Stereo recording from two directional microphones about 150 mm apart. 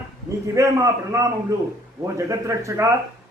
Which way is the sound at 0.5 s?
20° right (ahead or behind).